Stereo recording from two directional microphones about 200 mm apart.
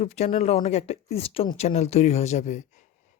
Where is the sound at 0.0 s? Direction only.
30° left (ahead or behind).